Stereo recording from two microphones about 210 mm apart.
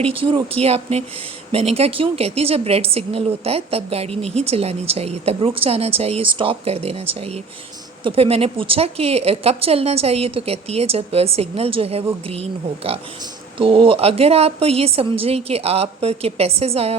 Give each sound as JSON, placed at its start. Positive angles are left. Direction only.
{"t": 0.0, "sound": "a woman's voice", "side_deg": -25}